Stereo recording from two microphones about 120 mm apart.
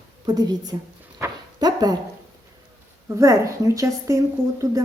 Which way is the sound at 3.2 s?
25° right (ahead or behind).